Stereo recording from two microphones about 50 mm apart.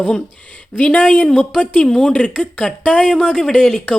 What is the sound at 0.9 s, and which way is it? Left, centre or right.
Speech, left.